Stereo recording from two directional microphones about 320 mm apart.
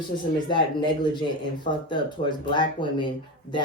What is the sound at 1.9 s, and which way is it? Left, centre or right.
Speech, centre.